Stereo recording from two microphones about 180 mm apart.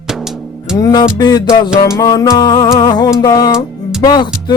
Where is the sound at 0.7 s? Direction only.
20° left (ahead or behind).